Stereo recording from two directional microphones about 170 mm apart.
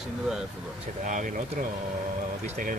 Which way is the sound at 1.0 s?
45° right (ahead or behind).